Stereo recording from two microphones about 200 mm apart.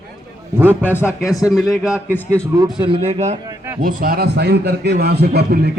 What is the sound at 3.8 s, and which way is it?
A man's voice, 45° right (ahead or behind).